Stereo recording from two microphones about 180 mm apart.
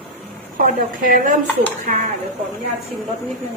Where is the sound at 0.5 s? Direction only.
50° right (ahead or behind).